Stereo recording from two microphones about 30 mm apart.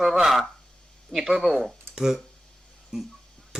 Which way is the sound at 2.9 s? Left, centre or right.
Right.